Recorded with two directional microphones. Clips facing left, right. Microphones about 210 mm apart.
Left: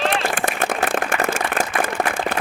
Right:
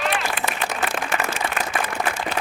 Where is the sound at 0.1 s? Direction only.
50° left (ahead or behind).